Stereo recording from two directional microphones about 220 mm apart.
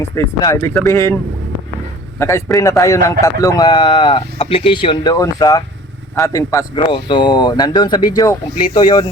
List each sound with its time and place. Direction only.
0.0 s a man's voice: 15° left (ahead or behind)
2.1 s a man's voice: 10° left (ahead or behind)